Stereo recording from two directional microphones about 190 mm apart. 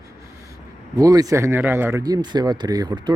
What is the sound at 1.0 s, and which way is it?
Speech, 20° right (ahead or behind).